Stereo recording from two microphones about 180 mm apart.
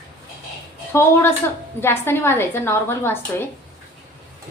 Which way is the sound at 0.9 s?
15° left (ahead or behind).